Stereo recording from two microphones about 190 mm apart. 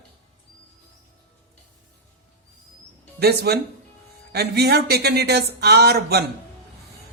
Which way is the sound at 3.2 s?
55° right (ahead or behind).